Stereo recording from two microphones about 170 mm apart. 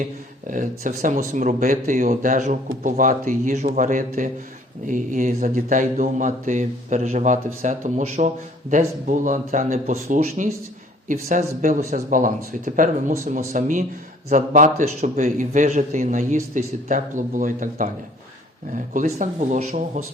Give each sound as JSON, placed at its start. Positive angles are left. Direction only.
{"t": 0.4, "sound": "a man's voice", "side_deg": -50}